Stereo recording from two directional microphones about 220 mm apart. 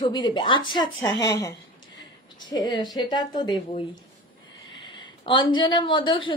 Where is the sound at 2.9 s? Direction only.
20° left (ahead or behind).